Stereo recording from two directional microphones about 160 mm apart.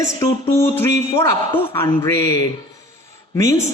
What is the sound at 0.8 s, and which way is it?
A man's voice, 15° left (ahead or behind).